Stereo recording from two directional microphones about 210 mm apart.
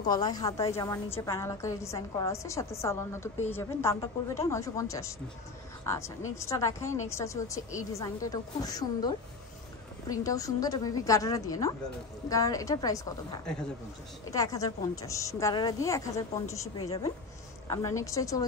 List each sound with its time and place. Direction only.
0.0 s a woman's voice: 20° left (ahead or behind)